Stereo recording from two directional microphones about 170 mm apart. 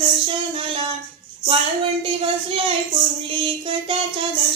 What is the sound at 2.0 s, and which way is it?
Music, 30° right (ahead or behind).